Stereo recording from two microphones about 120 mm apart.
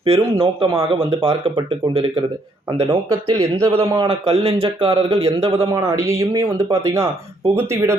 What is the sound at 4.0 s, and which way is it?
Speech, 50° right (ahead or behind).